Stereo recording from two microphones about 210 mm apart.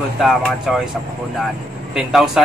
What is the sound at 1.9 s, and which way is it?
Speech, centre (ahead or behind).